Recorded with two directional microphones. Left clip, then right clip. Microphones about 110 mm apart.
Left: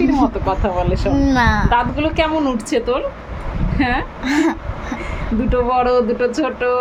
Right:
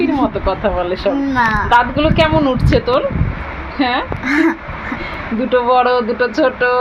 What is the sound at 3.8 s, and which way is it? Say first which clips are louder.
Speech: right 3 dB; 5° right (ahead or behind).